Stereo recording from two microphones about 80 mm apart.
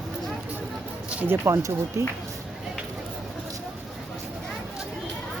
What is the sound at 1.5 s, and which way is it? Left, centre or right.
Speech, right.